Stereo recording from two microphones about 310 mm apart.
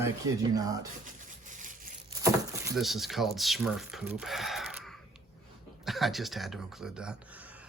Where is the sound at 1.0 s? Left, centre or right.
Right.